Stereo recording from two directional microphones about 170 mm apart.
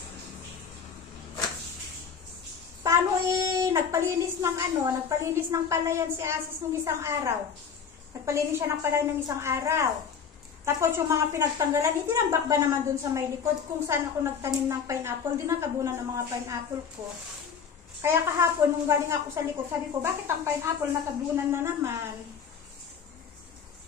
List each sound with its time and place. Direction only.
2.8 s a child's voice: 15° right (ahead or behind)
18.0 s a woman's voice: 15° right (ahead or behind)